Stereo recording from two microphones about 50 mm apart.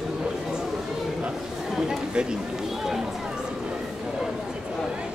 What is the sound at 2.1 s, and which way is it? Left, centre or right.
Speech, centre.